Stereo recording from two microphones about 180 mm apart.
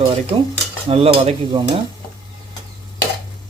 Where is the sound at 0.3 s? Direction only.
35° right (ahead or behind).